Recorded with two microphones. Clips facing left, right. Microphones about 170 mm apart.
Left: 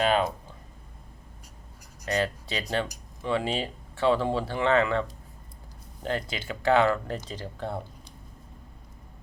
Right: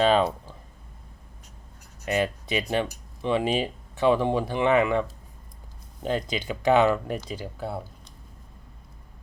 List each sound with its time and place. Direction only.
0.0 s speech: 30° right (ahead or behind)
2.0 s speech: 15° right (ahead or behind)